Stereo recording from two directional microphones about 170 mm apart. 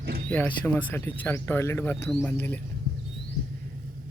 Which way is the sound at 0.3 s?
10° left (ahead or behind).